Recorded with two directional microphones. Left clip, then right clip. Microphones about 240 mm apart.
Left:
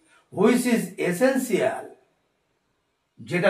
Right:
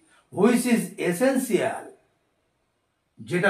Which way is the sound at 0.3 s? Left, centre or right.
Centre.